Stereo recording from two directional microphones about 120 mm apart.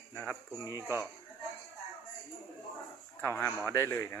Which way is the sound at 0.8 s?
20° right (ahead or behind).